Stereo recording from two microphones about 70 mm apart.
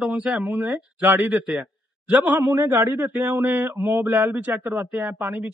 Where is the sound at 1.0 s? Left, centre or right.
Right.